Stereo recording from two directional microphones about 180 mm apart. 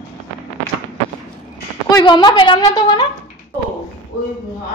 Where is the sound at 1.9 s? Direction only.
20° left (ahead or behind).